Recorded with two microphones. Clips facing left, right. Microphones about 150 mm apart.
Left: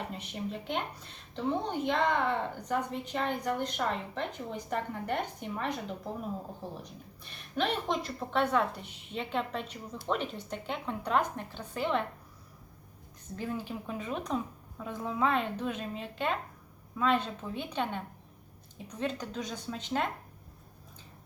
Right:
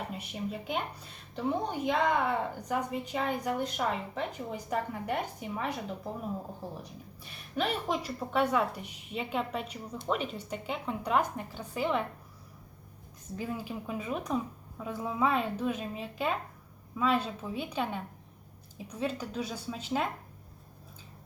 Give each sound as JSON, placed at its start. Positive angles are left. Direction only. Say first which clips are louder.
{"t": 0.1, "sound": "a woman's voice", "louder": "right 1 dB", "side_deg": -10}
{"t": 7.5, "sound": "a woman's voice", "louder": "even", "side_deg": -5}
{"t": 13.3, "sound": "a woman's voice", "louder": "even", "side_deg": -5}